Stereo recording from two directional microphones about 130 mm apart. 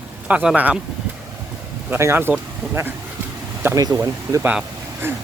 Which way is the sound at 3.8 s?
25° right (ahead or behind).